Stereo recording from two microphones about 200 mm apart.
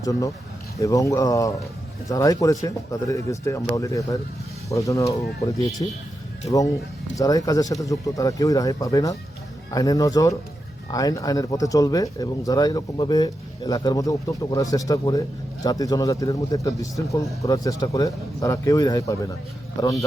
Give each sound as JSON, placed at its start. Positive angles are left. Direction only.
{"t": 0.0, "sound": "speech", "side_deg": 15}
{"t": 5.8, "sound": "speech", "side_deg": 25}